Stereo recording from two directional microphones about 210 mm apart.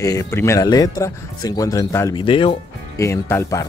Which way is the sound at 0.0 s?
15° left (ahead or behind).